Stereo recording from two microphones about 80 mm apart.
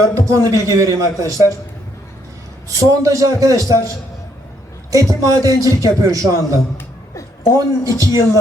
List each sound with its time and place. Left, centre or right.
0.1 s a man's voice: right
2.7 s a man's voice: right